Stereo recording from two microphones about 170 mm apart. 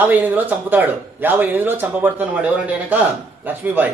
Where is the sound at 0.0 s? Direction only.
10° right (ahead or behind).